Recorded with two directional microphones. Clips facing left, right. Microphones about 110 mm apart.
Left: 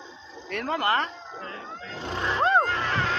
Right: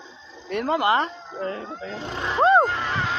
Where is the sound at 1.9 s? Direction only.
10° right (ahead or behind).